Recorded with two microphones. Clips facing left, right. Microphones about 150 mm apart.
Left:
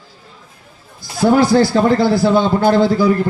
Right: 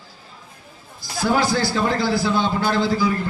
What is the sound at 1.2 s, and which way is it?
A man's voice, 55° left (ahead or behind).